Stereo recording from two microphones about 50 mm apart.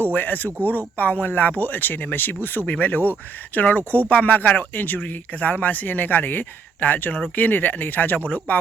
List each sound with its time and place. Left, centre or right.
0.1 s speech: left